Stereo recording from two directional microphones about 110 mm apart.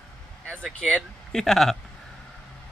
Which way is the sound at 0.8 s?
5° left (ahead or behind).